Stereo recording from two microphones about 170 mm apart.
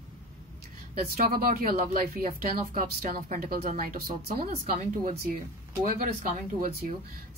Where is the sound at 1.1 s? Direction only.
60° right (ahead or behind).